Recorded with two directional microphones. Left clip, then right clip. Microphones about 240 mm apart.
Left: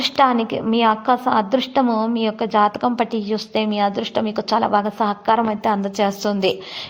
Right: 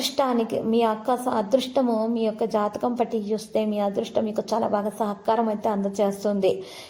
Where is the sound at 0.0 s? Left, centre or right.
Centre.